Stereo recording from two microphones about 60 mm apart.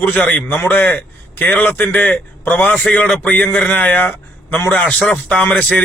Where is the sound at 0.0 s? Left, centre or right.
Left.